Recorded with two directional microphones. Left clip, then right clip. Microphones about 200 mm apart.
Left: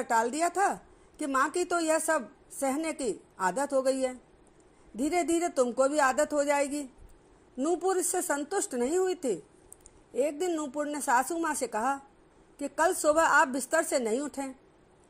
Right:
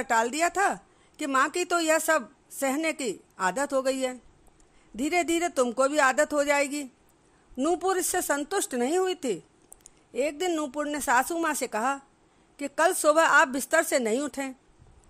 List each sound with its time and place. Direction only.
0.0 s a woman's voice: 25° right (ahead or behind)